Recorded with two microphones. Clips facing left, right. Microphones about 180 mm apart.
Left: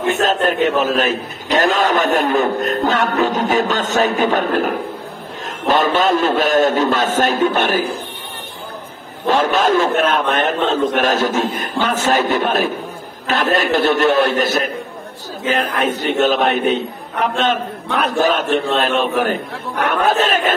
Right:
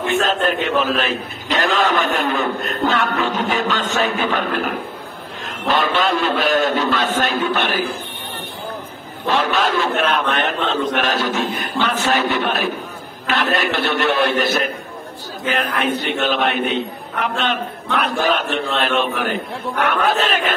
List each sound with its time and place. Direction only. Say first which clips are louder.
0.1 s a man's voice: left 1 dB; 45° left (ahead or behind)
5.7 s a man's voice: left 4 dB; 45° left (ahead or behind)
9.2 s a man's voice: left 3 dB; 45° left (ahead or behind)
20.1 s a man's voice: left 3 dB; 45° left (ahead or behind)